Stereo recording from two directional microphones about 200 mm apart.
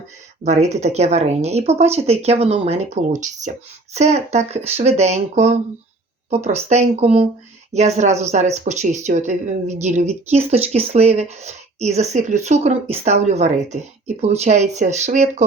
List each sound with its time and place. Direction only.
0.4 s speech: 35° right (ahead or behind)